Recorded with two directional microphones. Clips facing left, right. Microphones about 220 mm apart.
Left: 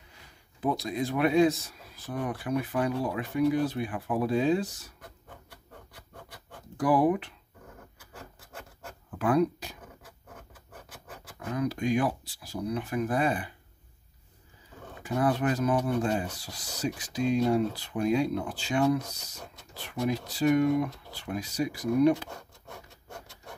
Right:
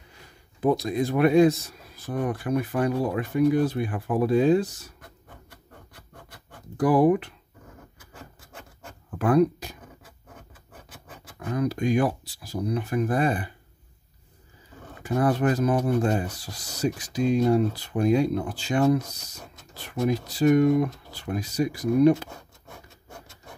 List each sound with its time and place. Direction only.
0.6 s speech: 45° right (ahead or behind)
6.8 s speech: 45° right (ahead or behind)
9.2 s speech: 45° right (ahead or behind)
11.5 s speech: 45° right (ahead or behind)
15.1 s speech: 40° right (ahead or behind)